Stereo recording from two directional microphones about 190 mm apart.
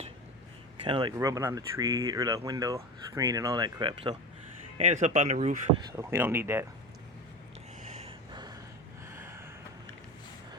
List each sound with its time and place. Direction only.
0.9 s speech: 25° right (ahead or behind)
4.8 s speech: 40° right (ahead or behind)
5.9 s speech: 15° right (ahead or behind)
8.3 s gasp: 25° right (ahead or behind)
9.0 s a sound: 15° right (ahead or behind)